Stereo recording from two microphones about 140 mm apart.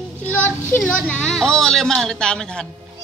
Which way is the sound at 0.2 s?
15° left (ahead or behind).